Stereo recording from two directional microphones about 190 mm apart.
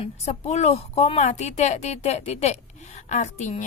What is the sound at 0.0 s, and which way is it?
Speech, 35° left (ahead or behind).